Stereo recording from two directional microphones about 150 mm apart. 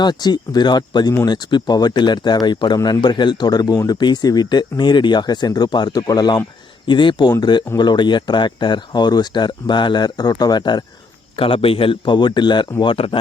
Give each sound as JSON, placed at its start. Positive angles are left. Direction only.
{"t": 0.0, "sound": "a man's voice", "side_deg": 30}